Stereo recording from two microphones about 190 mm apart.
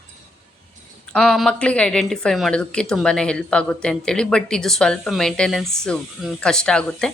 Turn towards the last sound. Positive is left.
turn(degrees=5)  # may be behind; listen again after turning